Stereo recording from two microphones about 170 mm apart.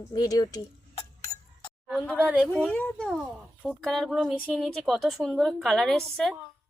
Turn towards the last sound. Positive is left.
turn(degrees=0)  # may be behind; listen again after turning